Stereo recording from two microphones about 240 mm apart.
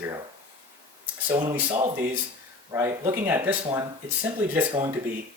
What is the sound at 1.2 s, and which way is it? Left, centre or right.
Speech, centre.